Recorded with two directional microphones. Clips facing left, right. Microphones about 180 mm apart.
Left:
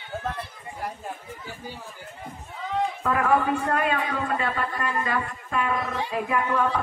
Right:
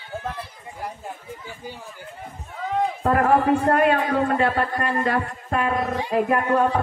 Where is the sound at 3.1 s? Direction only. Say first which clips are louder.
Right 5 dB; 45° right (ahead or behind).